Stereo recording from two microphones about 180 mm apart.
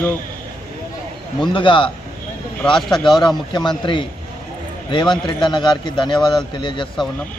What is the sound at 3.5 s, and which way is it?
Speech, 25° left (ahead or behind).